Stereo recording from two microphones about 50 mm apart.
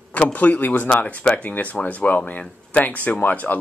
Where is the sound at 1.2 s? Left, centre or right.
Left.